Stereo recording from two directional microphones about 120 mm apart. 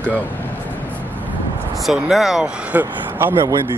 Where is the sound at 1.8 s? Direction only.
5° right (ahead or behind).